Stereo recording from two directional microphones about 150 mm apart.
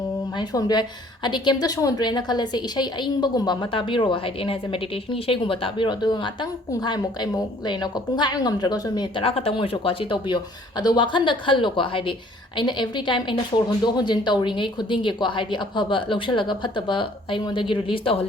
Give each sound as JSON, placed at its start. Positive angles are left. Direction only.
{"t": 0.3, "sound": "a woman's voice", "side_deg": 30}